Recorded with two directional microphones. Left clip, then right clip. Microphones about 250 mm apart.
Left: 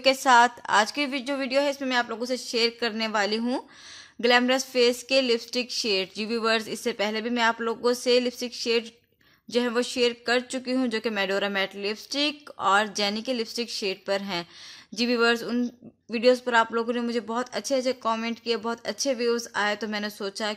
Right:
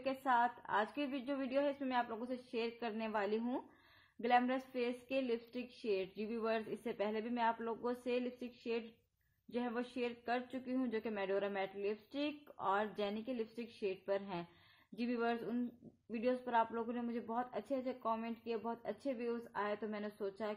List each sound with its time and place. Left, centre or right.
0.0 s speech: left